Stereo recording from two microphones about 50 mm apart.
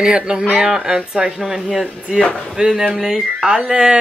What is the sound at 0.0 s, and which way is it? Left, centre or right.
Speech, centre.